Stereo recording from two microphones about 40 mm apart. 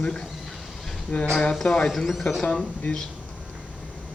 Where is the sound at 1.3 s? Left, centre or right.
Centre.